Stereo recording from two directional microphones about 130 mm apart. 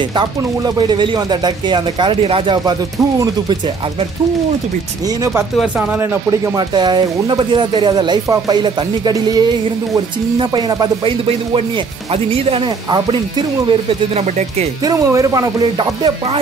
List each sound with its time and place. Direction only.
0.7 s speech: 35° right (ahead or behind)
6.7 s speech: 35° right (ahead or behind)
10.5 s speech: 35° right (ahead or behind)
13.7 s speech: 50° right (ahead or behind)
14.9 s music: 25° right (ahead or behind)